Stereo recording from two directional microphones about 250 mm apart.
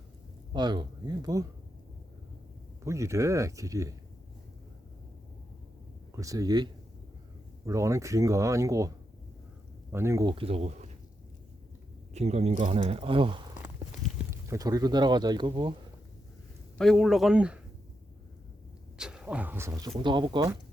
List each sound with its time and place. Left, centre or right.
0.5 s speech: centre
2.8 s speech: centre
6.1 s speech: centre
9.9 s speech: centre; by 10.8 s right
12.1 s speech: right
14.4 s speech: centre
16.7 s speech: centre
18.9 s speech: centre